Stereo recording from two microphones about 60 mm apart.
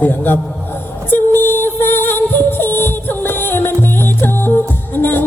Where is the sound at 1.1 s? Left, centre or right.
Left.